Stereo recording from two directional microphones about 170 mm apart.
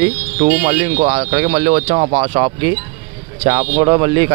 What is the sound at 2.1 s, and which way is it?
Speech, 30° right (ahead or behind).